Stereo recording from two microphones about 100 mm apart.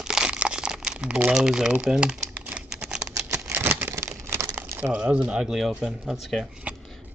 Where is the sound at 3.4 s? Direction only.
20° right (ahead or behind).